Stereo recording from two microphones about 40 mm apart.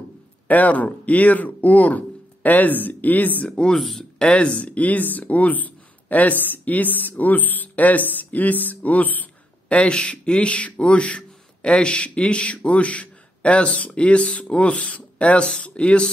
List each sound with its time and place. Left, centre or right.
0.5 s speech: left
3.5 s speech: left